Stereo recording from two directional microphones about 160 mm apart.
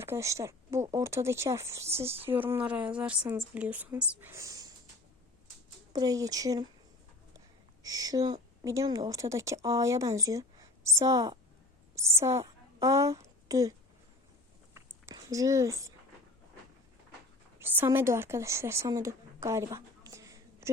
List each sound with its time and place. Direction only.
0.0 s speech: 15° right (ahead or behind)
5.9 s a woman's voice: 25° right (ahead or behind)
7.8 s a woman's voice: 20° right (ahead or behind)
14.7 s a sound: 15° right (ahead or behind)
17.6 s speech: 15° right (ahead or behind)